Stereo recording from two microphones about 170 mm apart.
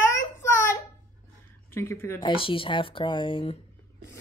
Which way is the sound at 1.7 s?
15° left (ahead or behind).